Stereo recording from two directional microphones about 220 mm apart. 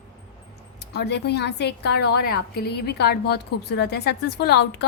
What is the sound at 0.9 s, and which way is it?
A woman's voice, 50° left (ahead or behind).